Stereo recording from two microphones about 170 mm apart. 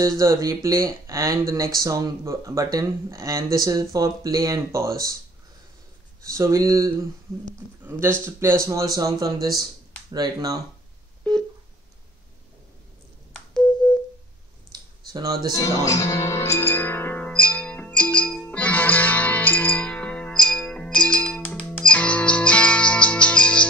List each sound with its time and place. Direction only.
0.2 s speech: 20° right (ahead or behind)
6.3 s speech: 15° right (ahead or behind)
8.5 s speech: 20° right (ahead or behind)
11.3 s telephone dialing: 5° left (ahead or behind)
13.5 s a sound: 5° left (ahead or behind)
14.7 s typing: 25° right (ahead or behind)
15.5 s music: 20° left (ahead or behind)